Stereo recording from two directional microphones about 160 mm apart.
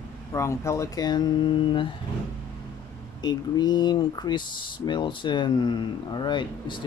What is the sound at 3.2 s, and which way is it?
Speech, 25° left (ahead or behind).